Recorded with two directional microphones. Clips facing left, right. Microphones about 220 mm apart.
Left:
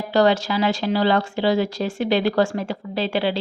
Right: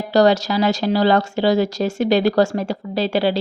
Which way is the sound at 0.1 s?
40° right (ahead or behind).